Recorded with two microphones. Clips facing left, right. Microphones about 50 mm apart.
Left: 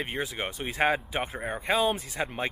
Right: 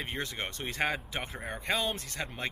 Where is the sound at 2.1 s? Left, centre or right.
Centre.